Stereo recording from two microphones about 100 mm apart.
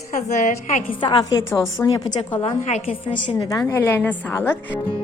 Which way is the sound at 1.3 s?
30° left (ahead or behind).